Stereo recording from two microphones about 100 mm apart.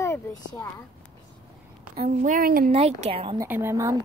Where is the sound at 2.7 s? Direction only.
90° right; by 3.3 s 70° right (ahead or behind).